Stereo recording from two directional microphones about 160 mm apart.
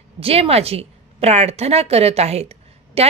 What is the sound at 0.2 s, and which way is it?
A woman's voice, 40° right (ahead or behind).